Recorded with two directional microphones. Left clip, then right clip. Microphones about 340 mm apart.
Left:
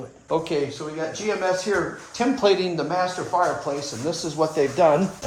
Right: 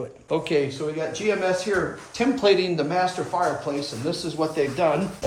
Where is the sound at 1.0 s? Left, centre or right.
Centre.